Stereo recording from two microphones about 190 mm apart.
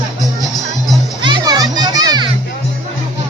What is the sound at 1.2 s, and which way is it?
Children playing, 25° right (ahead or behind).